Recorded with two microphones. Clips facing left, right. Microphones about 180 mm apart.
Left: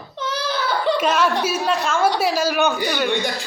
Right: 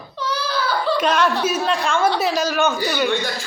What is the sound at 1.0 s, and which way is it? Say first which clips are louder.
A woman's voice: even; 5° left (ahead or behind).